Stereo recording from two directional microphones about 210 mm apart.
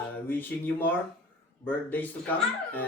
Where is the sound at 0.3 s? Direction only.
10° left (ahead or behind).